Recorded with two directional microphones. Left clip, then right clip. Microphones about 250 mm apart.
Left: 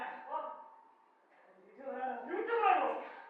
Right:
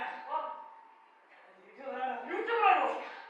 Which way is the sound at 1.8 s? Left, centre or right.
Centre.